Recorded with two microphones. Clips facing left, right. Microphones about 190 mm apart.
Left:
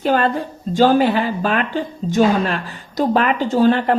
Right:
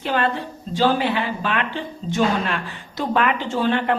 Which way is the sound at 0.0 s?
40° left (ahead or behind).